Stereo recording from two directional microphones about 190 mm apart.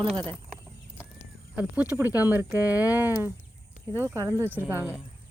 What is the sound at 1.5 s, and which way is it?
Speech, 5° right (ahead or behind).